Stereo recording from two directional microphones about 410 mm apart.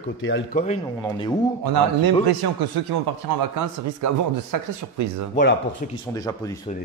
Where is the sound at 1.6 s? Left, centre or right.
Right.